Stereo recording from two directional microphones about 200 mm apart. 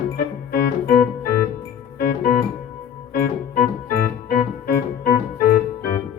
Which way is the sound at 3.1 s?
45° left (ahead or behind).